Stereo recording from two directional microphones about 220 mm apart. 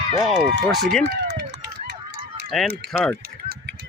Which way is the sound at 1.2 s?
50° right (ahead or behind).